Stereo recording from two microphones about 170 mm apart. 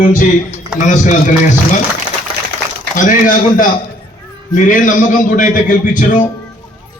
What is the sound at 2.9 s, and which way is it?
A man's voice, 50° left (ahead or behind).